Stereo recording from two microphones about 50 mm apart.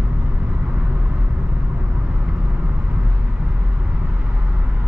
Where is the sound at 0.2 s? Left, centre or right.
Centre.